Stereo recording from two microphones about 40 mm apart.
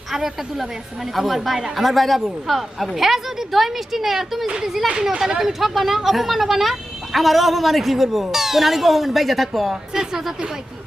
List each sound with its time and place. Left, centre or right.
0.1 s a woman's voice: centre
9.9 s a woman's voice: centre